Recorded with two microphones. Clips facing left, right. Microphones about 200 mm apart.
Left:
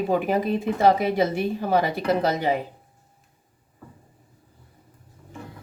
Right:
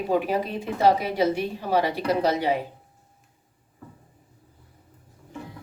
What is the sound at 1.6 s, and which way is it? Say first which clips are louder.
Speech: even; 45° left (ahead or behind).